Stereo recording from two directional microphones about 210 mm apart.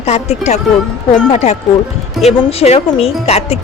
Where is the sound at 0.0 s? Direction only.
30° left (ahead or behind).